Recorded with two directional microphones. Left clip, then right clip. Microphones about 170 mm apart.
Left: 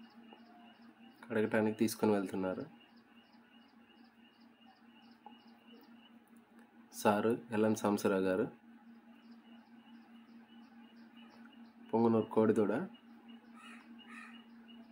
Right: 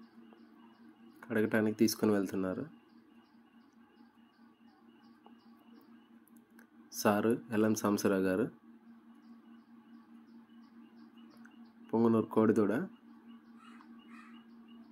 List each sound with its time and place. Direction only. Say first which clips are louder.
1.2 s speech: right 1 dB; 10° right (ahead or behind)
7.0 s speech: right 1 dB; 10° right (ahead or behind)
11.9 s speech: right 1 dB; 5° right (ahead or behind)